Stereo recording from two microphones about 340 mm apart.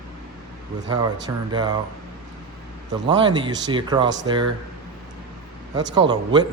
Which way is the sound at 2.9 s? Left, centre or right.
Centre.